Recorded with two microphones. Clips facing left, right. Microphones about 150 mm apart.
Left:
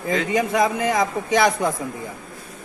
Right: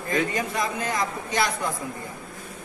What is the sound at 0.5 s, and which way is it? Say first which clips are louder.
Speech: left 8 dB; 90° left.